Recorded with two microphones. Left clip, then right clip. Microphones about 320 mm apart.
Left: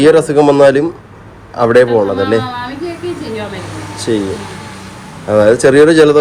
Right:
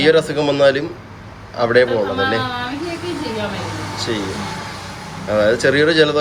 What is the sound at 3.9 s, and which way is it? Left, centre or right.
Air conditioning, centre.